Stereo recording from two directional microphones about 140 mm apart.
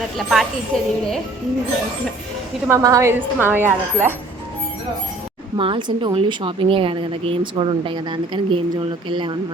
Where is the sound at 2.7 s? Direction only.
20° right (ahead or behind).